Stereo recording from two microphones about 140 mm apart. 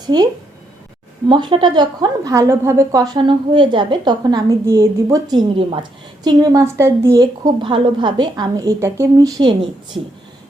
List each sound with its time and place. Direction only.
0.0 s speech: 30° right (ahead or behind)
1.3 s a woman's voice: 35° right (ahead or behind)